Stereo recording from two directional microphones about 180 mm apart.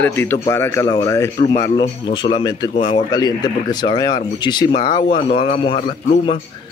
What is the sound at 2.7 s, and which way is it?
Speech, 45° left (ahead or behind).